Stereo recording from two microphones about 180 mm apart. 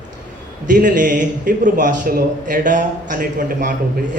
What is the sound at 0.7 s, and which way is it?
A man's voice, 45° right (ahead or behind).